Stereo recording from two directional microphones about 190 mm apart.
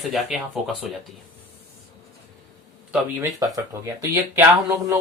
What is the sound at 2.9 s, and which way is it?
Speech, 15° right (ahead or behind).